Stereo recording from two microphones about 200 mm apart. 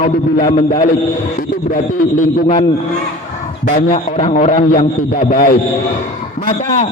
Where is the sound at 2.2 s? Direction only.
30° left (ahead or behind).